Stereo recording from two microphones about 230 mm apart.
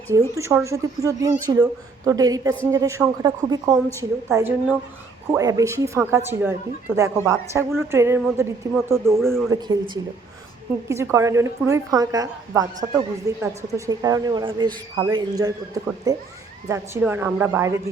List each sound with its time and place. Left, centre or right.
0.1 s speech: centre
10.8 s speech: centre